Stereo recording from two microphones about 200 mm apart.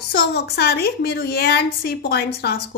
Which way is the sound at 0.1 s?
55° left (ahead or behind).